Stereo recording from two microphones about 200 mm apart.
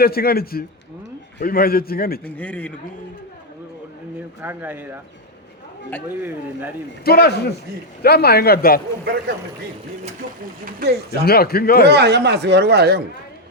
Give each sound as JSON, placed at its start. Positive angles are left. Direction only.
{"t": 0.0, "sound": "a man's voice", "side_deg": 50}
{"t": 2.2, "sound": "speech", "side_deg": 5}
{"t": 4.4, "sound": "speech", "side_deg": -10}
{"t": 6.1, "sound": "speech", "side_deg": -10}
{"t": 7.0, "sound": "a man's voice", "side_deg": 50}
{"t": 10.7, "sound": "speech", "side_deg": -50}
{"t": 11.3, "sound": "a man's voice", "side_deg": 50}
{"t": 11.9, "sound": "speech", "side_deg": -55}